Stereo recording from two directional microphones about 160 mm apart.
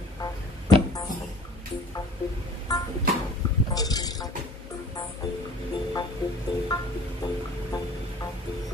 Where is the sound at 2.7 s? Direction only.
25° left (ahead or behind).